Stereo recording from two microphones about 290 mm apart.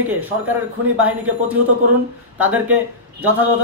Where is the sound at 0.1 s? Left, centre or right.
Centre.